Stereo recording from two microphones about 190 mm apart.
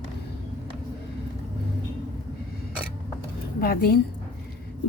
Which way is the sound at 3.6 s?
55° left (ahead or behind).